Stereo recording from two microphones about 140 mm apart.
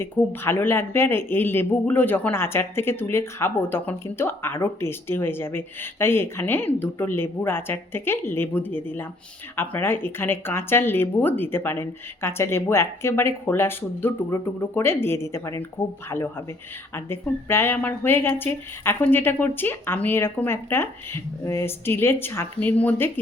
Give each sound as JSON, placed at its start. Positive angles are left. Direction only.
{"t": 0.0, "sound": "speech", "side_deg": 15}